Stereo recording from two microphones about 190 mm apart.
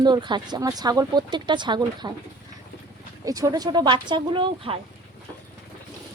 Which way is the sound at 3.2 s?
20° right (ahead or behind).